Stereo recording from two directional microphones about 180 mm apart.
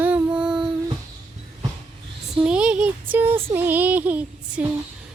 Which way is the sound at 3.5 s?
10° right (ahead or behind).